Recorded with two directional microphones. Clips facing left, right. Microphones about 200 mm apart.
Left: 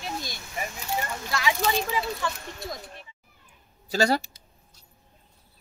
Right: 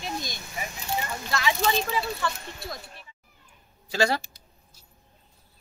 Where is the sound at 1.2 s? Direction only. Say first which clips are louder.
Right 1 dB; 10° left (ahead or behind).